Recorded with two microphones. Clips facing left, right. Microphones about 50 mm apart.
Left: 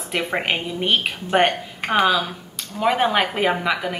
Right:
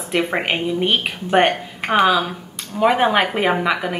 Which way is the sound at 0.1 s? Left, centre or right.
Centre.